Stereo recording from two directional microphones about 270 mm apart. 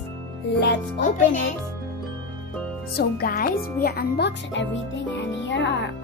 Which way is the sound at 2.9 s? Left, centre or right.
Left.